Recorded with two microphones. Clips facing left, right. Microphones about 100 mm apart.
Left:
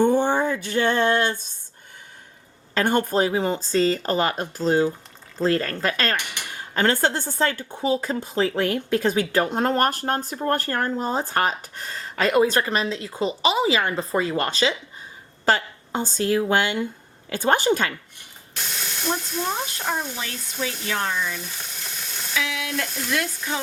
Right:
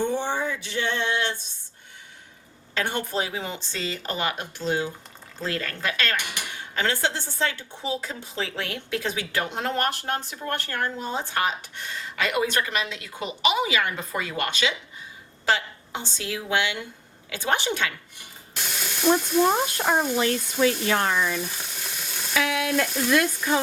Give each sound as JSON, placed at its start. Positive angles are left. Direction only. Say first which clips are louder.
{"t": 0.0, "sound": "a sound", "louder": "left 7 dB", "side_deg": 45}
{"t": 2.7, "sound": "a woman's voice", "louder": "left 7 dB", "side_deg": 45}
{"t": 18.6, "sound": "ratchet", "louder": "even", "side_deg": -5}
{"t": 19.8, "sound": "speech", "louder": "right 5 dB", "side_deg": -60}
{"t": 21.6, "sound": "sizzle", "louder": "even", "side_deg": -5}
{"t": 22.4, "sound": "stir", "louder": "right 3 dB", "side_deg": -40}